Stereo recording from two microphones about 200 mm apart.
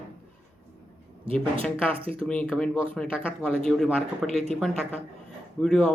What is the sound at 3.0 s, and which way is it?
Speech, centre (ahead or behind).